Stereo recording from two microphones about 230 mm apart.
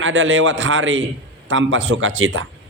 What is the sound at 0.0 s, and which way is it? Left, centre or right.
A man's voice, right.